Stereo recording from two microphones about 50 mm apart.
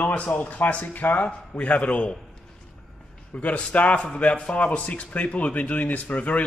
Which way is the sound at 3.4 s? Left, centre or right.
Left.